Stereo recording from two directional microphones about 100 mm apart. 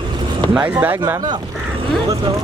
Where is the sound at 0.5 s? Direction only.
15° right (ahead or behind).